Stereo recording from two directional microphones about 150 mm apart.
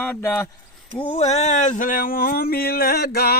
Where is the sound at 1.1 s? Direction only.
45° left (ahead or behind).